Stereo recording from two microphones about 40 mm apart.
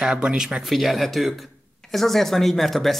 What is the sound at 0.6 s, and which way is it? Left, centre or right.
Speech, centre.